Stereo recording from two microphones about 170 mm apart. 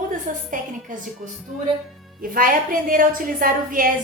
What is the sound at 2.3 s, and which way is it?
A woman's voice, 55° right (ahead or behind).